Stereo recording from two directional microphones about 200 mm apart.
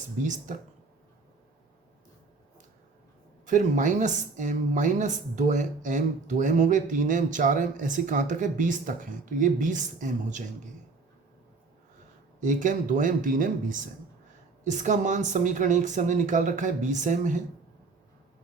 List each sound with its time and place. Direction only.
0.2 s speech: 40° right (ahead or behind)
3.4 s speech: 40° right (ahead or behind)
12.4 s speech: 40° right (ahead or behind)